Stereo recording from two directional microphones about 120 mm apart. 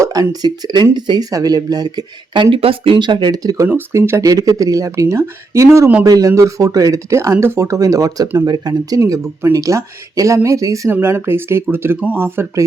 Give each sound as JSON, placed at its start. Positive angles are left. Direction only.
{"t": 0.0, "sound": "speech", "side_deg": -30}
{"t": 3.7, "sound": "speech", "side_deg": -20}